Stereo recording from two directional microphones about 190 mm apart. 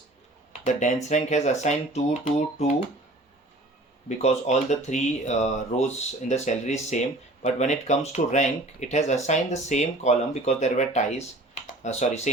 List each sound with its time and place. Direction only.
0.6 s speech: 40° left (ahead or behind)
4.2 s speech: 35° left (ahead or behind)